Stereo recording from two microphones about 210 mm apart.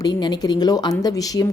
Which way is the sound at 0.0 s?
20° left (ahead or behind).